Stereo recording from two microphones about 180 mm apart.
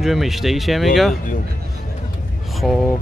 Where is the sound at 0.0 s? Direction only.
Centre (ahead or behind).